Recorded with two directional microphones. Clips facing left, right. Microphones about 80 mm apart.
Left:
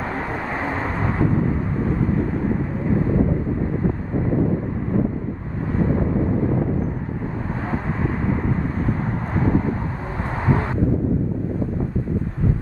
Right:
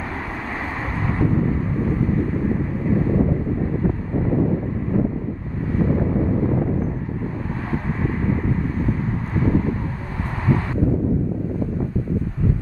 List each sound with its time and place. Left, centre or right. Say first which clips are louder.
0.4 s vehicle: left 3 dB; centre
10.3 s vehicle: even; left